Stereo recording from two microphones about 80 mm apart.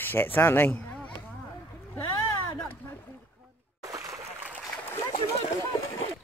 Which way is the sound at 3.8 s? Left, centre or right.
Right.